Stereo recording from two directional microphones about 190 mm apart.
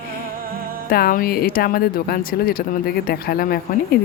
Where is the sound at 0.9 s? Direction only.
50° left (ahead or behind).